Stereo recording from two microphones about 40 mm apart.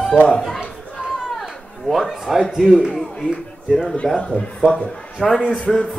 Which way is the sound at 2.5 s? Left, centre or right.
Centre.